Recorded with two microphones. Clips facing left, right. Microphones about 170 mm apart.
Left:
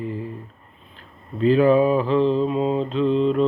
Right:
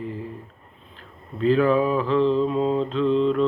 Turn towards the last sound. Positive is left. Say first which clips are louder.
# left 1 dB
turn(degrees=15)  # may be behind; listen again after turning